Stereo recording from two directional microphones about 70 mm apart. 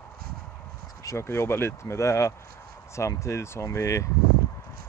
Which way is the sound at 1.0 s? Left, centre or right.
Left.